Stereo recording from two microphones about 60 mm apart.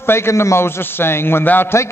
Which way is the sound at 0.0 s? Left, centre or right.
Left.